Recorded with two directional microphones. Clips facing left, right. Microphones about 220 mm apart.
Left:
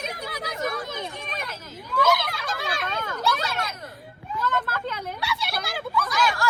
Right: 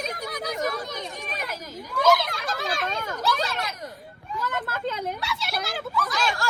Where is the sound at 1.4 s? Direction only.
10° right (ahead or behind).